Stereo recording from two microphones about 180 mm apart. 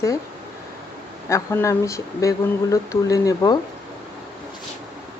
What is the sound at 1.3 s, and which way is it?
Speech, 15° left (ahead or behind).